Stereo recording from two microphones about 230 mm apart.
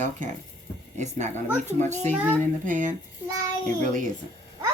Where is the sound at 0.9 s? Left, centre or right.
Right.